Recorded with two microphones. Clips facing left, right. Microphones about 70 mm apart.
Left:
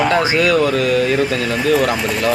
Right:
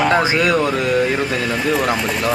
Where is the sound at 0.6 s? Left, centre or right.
Right; by 1.9 s centre.